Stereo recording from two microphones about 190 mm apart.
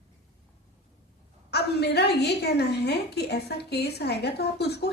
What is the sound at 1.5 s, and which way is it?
A woman's voice, 60° left (ahead or behind).